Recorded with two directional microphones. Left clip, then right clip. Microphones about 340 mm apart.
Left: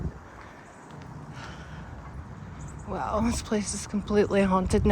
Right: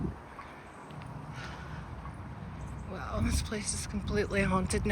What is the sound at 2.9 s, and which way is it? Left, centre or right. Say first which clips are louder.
Speech: left 9 dB; centre.